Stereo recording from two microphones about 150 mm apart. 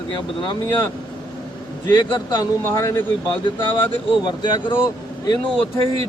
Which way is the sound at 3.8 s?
30° left (ahead or behind).